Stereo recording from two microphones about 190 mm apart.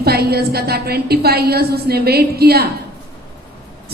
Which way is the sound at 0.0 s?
55° right (ahead or behind).